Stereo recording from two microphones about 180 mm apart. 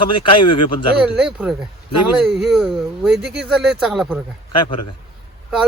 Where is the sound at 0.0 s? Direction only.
25° left (ahead or behind).